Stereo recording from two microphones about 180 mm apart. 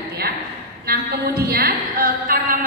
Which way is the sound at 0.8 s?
60° right (ahead or behind).